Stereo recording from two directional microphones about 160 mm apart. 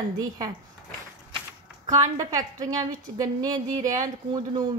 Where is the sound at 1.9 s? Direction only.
25° right (ahead or behind).